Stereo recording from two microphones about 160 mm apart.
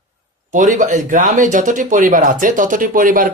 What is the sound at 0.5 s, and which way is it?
Speech, 55° right (ahead or behind).